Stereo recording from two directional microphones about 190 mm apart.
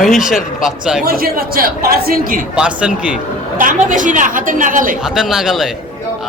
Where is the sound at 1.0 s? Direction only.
50° right (ahead or behind).